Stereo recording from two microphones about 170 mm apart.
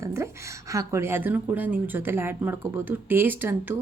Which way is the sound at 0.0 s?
15° right (ahead or behind).